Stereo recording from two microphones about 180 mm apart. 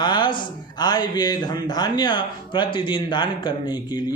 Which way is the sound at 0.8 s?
25° left (ahead or behind).